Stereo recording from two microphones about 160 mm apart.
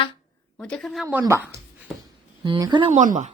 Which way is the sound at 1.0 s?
20° right (ahead or behind).